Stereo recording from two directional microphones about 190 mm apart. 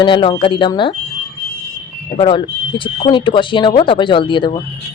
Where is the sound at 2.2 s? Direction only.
25° left (ahead or behind).